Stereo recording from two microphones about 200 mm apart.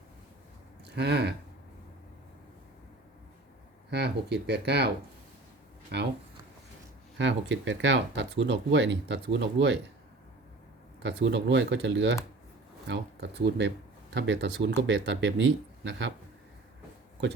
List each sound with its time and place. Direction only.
0.9 s speech: 55° right (ahead or behind)
3.8 s speech: 55° right (ahead or behind)
5.9 s speech: 55° right (ahead or behind)
7.2 s speech: 65° right (ahead or behind)
11.0 s speech: 60° right (ahead or behind)